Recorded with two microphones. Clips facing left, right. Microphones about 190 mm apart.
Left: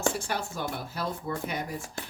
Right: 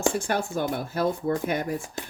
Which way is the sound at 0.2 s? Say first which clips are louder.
Right 6 dB; 50° right (ahead or behind).